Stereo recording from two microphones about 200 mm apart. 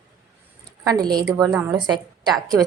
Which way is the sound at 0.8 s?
20° right (ahead or behind).